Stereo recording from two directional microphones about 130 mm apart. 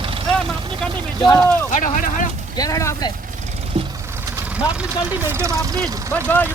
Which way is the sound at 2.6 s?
25° left (ahead or behind).